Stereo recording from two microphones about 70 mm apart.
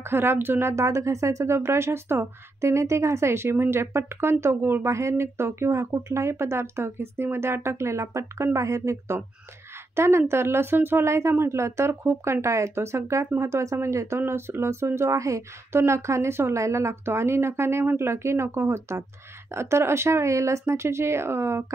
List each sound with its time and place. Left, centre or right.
0.1 s speech: right
4.9 s speech: right